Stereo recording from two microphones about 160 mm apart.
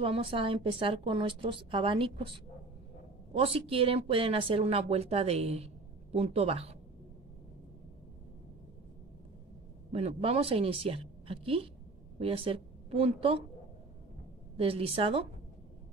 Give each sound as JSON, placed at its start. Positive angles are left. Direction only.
{"t": 0.0, "sound": "a woman's voice", "side_deg": -35}
{"t": 9.9, "sound": "a woman's voice", "side_deg": -40}
{"t": 14.6, "sound": "a woman's voice", "side_deg": -35}